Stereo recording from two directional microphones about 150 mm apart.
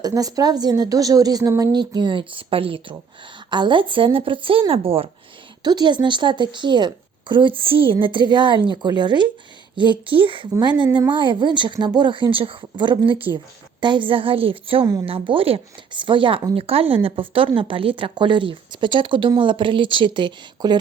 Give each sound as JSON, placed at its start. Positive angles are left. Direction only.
{"t": 0.0, "sound": "a woman's voice", "side_deg": -25}